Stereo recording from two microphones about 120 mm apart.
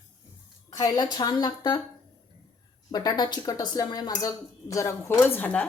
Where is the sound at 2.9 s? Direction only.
35° left (ahead or behind); by 5.7 s 15° left (ahead or behind).